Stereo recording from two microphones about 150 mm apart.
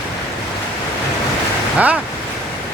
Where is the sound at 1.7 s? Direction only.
10° right (ahead or behind).